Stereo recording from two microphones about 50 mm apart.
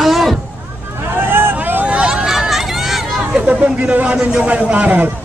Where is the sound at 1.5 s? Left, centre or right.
Right.